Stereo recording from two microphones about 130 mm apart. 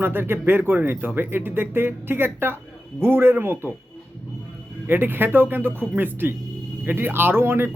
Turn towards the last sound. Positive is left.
turn(degrees=-20)  # may be behind; listen again after turning